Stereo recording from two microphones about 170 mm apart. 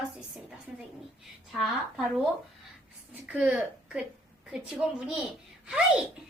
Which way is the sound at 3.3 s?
10° right (ahead or behind).